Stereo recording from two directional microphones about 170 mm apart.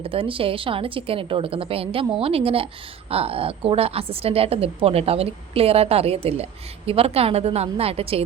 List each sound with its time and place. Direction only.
0.0 s a woman's voice: 35° right (ahead or behind)